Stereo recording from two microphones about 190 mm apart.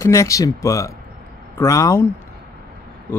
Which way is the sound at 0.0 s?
15° left (ahead or behind).